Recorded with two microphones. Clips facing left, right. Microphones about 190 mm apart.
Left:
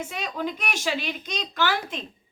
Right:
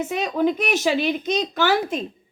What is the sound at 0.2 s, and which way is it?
Speech, 45° right (ahead or behind).